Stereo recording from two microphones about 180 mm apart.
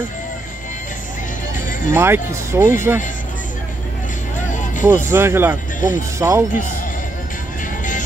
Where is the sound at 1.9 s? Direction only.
15° right (ahead or behind).